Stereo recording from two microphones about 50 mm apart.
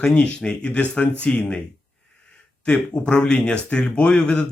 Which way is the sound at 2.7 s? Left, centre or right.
Centre.